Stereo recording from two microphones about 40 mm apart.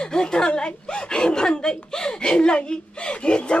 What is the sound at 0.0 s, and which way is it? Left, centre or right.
Speech, centre.